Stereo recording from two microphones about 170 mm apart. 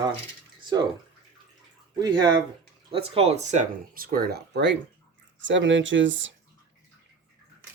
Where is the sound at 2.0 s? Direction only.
25° right (ahead or behind); by 6.3 s 90° right.